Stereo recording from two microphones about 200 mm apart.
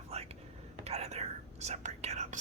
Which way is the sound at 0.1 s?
30° right (ahead or behind).